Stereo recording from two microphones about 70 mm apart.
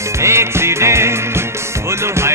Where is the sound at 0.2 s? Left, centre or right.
Right.